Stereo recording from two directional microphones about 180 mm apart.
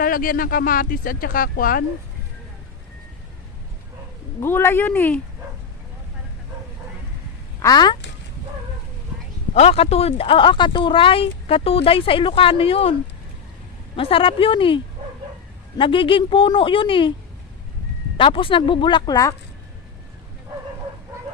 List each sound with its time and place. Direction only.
0.0 s speech: 50° left (ahead or behind)
4.4 s a woman's voice: 15° left (ahead or behind)
7.6 s speech: 20° left (ahead or behind)
9.6 s speech: 35° left (ahead or behind)
13.9 s speech: 30° left (ahead or behind)
15.8 s speech: 30° left (ahead or behind)
18.2 s speech: 30° left (ahead or behind)